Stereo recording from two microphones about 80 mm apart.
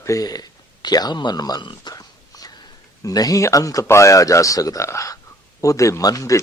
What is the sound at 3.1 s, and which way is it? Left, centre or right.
A man's voice, left.